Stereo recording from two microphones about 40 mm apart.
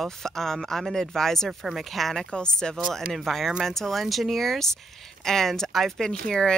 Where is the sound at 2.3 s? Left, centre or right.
Left.